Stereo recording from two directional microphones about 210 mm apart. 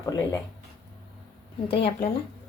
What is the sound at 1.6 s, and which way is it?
Speech, 25° left (ahead or behind).